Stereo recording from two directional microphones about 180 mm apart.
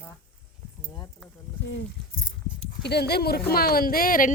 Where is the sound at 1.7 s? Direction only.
90° left.